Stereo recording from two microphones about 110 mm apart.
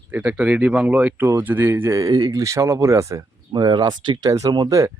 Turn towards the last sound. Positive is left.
turn(degrees=-35)  # may be behind; listen again after turning